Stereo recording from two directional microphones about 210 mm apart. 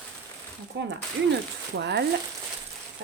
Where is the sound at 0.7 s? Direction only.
60° right (ahead or behind).